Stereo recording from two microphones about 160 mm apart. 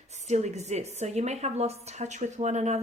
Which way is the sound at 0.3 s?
45° right (ahead or behind).